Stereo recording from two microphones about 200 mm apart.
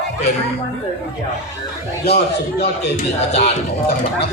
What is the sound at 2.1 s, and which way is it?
Speech, 55° left (ahead or behind).